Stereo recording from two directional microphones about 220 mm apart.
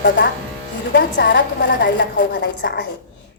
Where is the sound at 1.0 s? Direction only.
50° left (ahead or behind).